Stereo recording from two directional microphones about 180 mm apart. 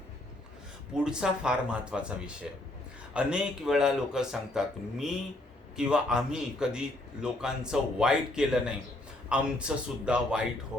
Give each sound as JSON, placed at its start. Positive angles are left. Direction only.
{"t": 0.9, "sound": "a man's voice", "side_deg": -5}